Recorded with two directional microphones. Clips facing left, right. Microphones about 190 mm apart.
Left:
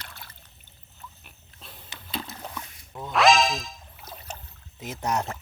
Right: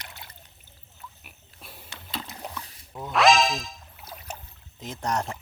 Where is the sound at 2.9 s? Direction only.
Centre (ahead or behind).